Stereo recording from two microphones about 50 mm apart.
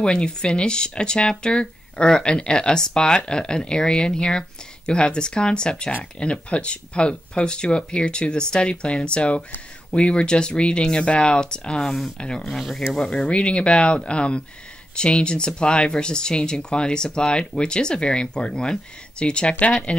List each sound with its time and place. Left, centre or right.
0.0 s speech: centre
12.4 s speech: centre; by 20.0 s left